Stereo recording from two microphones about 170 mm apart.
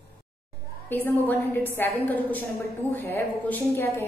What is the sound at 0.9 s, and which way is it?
A woman's voice, 10° left (ahead or behind).